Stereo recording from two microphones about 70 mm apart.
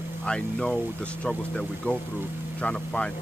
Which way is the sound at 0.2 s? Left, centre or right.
Centre.